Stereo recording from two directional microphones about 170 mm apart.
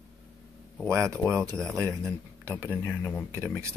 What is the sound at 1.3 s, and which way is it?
Speech, 20° right (ahead or behind).